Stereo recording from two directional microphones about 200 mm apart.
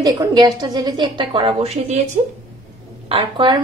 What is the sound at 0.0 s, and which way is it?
Speech, 20° right (ahead or behind).